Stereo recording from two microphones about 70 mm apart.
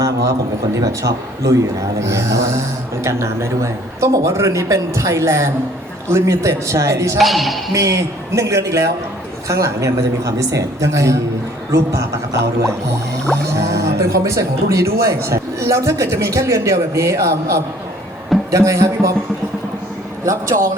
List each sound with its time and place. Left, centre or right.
0.0 s speech: right
7.2 s speech: centre
7.7 s speech: right
20.2 s speech: right